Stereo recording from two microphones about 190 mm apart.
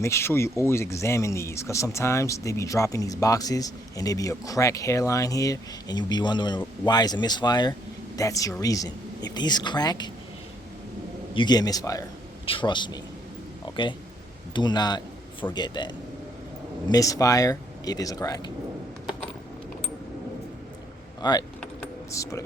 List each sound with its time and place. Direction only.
0.0 s speech: 15° left (ahead or behind)
11.3 s speech: 20° left (ahead or behind)
16.9 s speech: 15° left (ahead or behind)
21.2 s speech: 20° left (ahead or behind)